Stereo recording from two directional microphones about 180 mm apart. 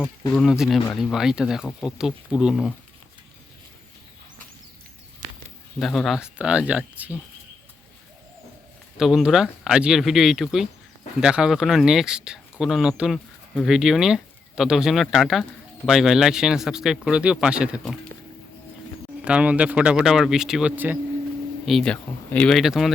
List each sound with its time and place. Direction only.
0.3 s speech: centre (ahead or behind)
5.8 s speech: centre (ahead or behind)
9.0 s speech: centre (ahead or behind)
19.2 s speech: 5° right (ahead or behind)
21.7 s speech: 5° left (ahead or behind)